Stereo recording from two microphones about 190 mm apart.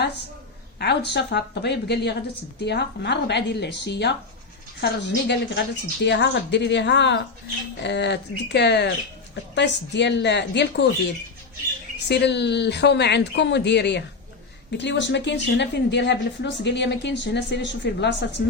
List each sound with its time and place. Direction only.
0.8 s a woman's voice: 65° left (ahead or behind)
12.0 s a woman's voice: 65° left (ahead or behind)